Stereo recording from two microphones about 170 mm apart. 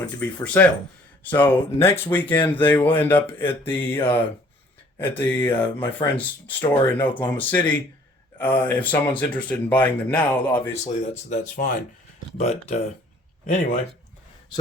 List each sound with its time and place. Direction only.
0.2 s speech: 10° left (ahead or behind)
5.8 s speech: 30° left (ahead or behind)
6.6 s speech: 10° left (ahead or behind)
11.3 s speech: 45° left (ahead or behind)